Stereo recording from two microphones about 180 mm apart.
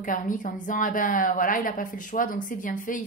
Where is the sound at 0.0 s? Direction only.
45° left (ahead or behind).